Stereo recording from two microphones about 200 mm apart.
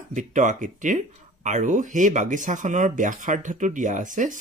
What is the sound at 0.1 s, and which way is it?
Speech, 40° right (ahead or behind).